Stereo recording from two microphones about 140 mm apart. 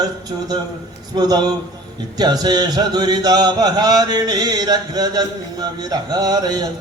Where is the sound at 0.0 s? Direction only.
30° right (ahead or behind).